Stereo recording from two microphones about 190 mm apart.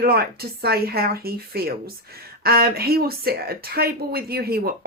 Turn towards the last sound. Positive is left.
turn(degrees=-55)  # may be behind; listen again after turning